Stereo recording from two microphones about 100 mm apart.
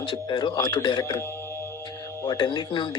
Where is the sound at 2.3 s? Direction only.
50° left (ahead or behind).